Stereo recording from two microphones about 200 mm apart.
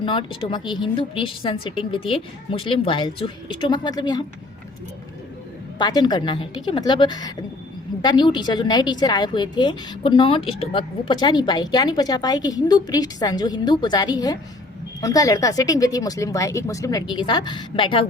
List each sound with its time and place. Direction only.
0.0 s a woman's voice: 25° left (ahead or behind)
5.8 s a woman's voice: 20° left (ahead or behind)